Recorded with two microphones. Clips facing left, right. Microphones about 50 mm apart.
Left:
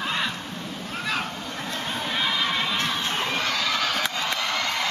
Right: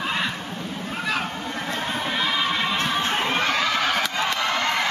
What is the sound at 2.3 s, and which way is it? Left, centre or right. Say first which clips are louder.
Children shouting: right 2 dB; centre.